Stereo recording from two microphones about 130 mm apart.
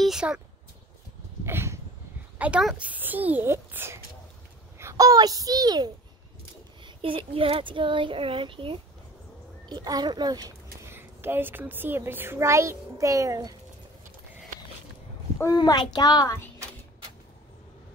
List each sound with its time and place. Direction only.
0.0 s a sound: 5° right (ahead or behind)
1.4 s a sound: 20° right (ahead or behind)
2.8 s a child's voice: 15° right (ahead or behind); by 5.9 s 30° right (ahead or behind)
6.8 s speech: 45° right (ahead or behind)
9.8 s speech: 30° right (ahead or behind)
10.9 s a child's voice: 15° right (ahead or behind)
15.5 s a child's voice: 30° left (ahead or behind)